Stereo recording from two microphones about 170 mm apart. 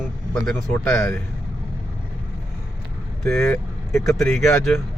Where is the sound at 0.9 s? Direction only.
15° left (ahead or behind).